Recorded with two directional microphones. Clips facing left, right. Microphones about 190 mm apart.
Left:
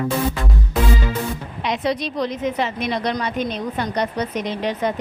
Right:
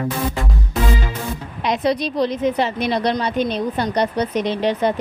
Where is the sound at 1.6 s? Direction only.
35° right (ahead or behind).